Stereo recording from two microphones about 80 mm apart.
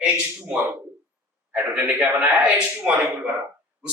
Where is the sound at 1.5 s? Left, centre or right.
Centre.